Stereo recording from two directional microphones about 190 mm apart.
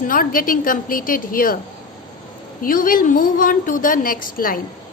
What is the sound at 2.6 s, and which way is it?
A woman's voice, 45° left (ahead or behind).